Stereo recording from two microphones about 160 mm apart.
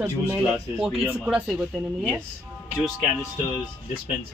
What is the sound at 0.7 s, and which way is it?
Speech, centre (ahead or behind).